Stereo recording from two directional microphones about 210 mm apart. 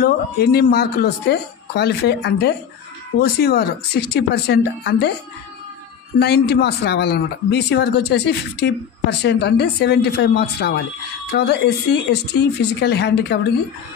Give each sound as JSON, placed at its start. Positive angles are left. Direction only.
{"t": 0.0, "sound": "speech", "side_deg": 50}
{"t": 6.1, "sound": "speech", "side_deg": 50}